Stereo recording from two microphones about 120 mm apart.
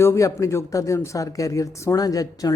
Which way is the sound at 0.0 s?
25° left (ahead or behind).